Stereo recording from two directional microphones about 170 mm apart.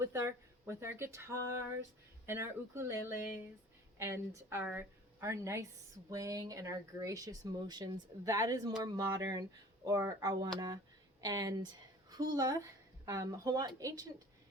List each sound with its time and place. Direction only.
0.0 s a woman's voice: 15° right (ahead or behind)